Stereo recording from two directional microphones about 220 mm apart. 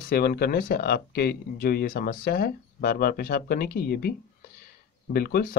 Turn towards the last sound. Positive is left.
turn(degrees=40)  # may be behind; listen again after turning